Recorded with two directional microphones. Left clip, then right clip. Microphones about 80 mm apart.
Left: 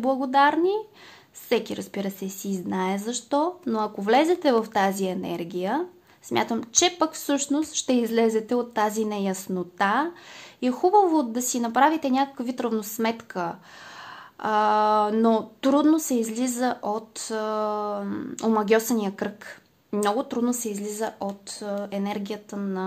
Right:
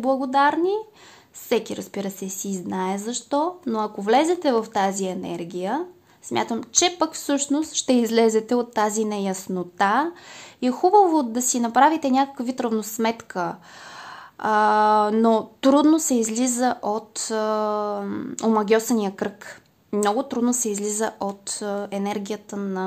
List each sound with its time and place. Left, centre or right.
0.0 s a woman's voice: centre; by 15.7 s right
15.7 s a woman's voice: right
18.9 s speech: right
20.0 s a woman's voice: right
20.4 s speech: right
20.7 s speech: right
21.8 s speech: right